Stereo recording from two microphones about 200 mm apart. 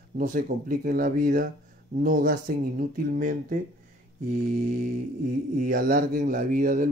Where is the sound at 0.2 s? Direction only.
45° right (ahead or behind).